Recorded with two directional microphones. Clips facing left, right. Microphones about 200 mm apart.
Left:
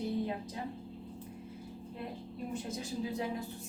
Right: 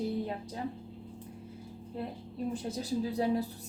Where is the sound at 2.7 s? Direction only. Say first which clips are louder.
Right 5 dB; 35° right (ahead or behind).